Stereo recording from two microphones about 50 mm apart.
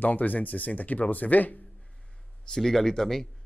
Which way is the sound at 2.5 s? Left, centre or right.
Centre.